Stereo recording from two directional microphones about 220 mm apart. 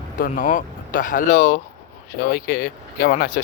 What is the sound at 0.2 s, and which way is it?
Speech, 35° left (ahead or behind).